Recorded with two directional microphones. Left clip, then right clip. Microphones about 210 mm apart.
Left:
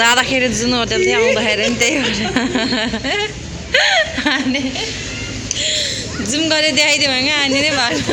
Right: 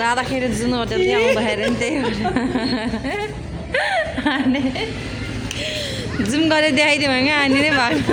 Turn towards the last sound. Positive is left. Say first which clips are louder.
# left 1 dB
turn(degrees=-25)  # may be behind; listen again after turning